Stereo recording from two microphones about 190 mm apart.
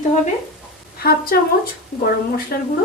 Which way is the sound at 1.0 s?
50° left (ahead or behind).